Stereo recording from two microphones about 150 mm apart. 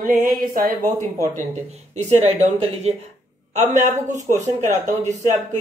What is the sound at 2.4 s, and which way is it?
Speech, 50° right (ahead or behind).